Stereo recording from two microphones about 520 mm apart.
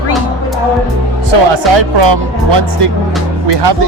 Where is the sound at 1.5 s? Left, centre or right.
Right.